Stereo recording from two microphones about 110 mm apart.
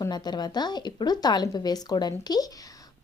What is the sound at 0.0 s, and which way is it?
Speech, 40° left (ahead or behind).